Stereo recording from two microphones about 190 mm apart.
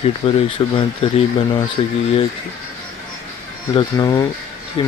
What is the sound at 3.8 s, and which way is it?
Speech, 20° left (ahead or behind).